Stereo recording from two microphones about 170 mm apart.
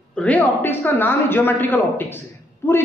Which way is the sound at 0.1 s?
10° left (ahead or behind).